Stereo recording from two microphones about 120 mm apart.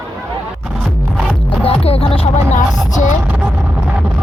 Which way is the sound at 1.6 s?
55° left (ahead or behind).